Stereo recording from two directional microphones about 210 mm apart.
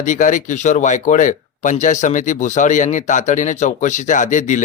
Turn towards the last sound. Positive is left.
turn(degrees=35)  # may be behind; listen again after turning